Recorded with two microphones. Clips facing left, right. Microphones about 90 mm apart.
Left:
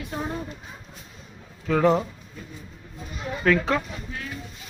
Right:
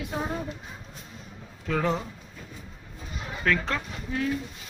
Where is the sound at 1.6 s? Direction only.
5° left (ahead or behind).